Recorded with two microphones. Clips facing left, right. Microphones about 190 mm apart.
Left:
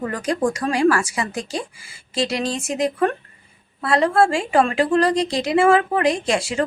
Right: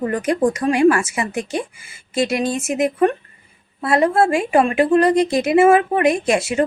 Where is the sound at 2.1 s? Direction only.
25° left (ahead or behind).